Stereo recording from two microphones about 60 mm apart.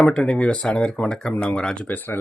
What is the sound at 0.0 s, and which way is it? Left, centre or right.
Speech, left.